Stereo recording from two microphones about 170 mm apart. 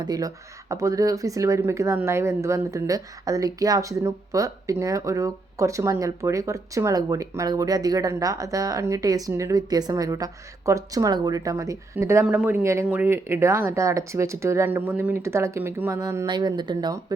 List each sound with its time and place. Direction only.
0.0 s speech: 20° right (ahead or behind)